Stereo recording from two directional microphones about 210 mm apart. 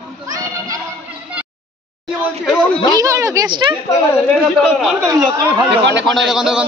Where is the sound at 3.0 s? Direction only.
15° right (ahead or behind).